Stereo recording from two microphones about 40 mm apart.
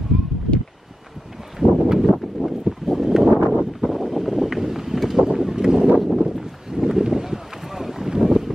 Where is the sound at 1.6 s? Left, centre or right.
Right.